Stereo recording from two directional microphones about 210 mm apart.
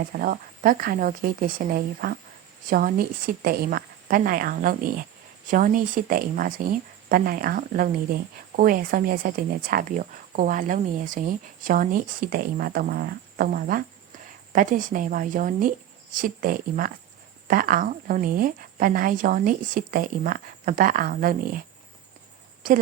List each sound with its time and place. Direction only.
0.1 s a woman's voice: 40° right (ahead or behind)